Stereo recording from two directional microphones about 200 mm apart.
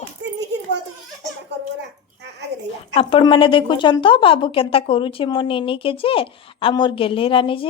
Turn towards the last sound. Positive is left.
turn(degrees=25)  # may be behind; listen again after turning